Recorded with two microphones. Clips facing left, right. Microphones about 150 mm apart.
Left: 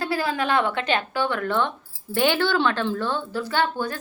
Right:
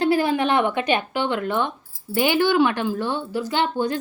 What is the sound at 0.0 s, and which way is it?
A woman's voice, 20° right (ahead or behind).